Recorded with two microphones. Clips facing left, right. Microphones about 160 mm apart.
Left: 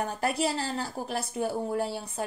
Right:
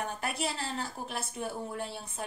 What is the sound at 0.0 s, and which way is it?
A woman's voice, 35° left (ahead or behind).